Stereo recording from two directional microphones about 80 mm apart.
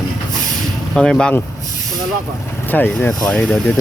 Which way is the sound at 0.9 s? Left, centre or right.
Centre.